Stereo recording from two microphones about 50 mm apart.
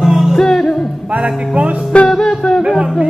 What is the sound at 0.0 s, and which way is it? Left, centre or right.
Music, centre.